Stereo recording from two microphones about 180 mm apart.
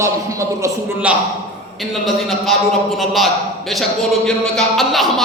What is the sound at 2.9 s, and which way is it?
Speech, centre (ahead or behind).